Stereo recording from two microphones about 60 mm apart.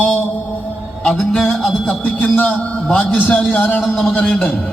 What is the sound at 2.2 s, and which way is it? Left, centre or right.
A man's voice, left.